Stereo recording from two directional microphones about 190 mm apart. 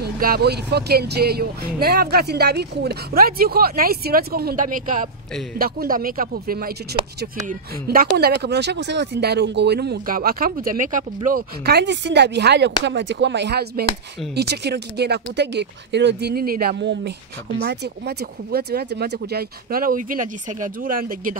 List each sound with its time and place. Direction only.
0.0 s speech: 55° right (ahead or behind)